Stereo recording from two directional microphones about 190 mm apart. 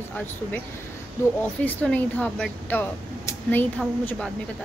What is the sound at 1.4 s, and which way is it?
Speech, 5° left (ahead or behind).